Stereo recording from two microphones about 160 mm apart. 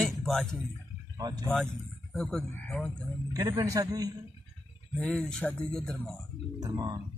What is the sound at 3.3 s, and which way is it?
Speech, 20° right (ahead or behind).